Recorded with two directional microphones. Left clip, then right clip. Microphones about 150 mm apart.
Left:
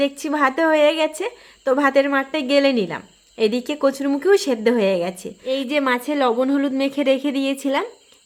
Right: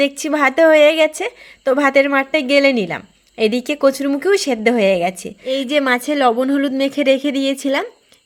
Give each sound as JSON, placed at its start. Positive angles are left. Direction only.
{"t": 0.0, "sound": "a woman's voice", "side_deg": -30}